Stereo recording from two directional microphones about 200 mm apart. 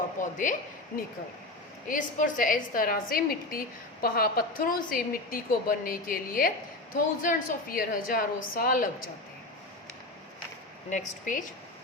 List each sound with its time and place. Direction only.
0.2 s speech: 40° left (ahead or behind)
1.9 s a woman's voice: 40° left (ahead or behind)
10.8 s a woman's voice: 40° left (ahead or behind)